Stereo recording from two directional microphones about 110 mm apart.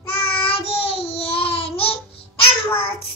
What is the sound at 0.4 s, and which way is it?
Child singing, 60° left (ahead or behind).